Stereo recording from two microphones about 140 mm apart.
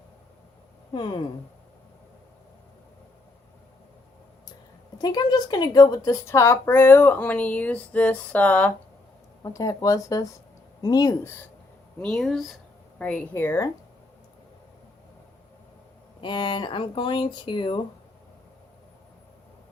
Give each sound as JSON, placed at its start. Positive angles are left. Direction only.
{"t": 4.9, "sound": "a woman's voice", "side_deg": 30}
{"t": 9.4, "sound": "speech", "side_deg": 25}
{"t": 11.9, "sound": "a woman's voice", "side_deg": 5}
{"t": 16.2, "sound": "speech", "side_deg": 35}